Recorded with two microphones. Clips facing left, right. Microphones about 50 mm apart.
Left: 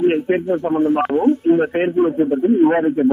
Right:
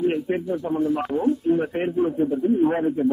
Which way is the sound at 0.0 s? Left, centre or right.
Left.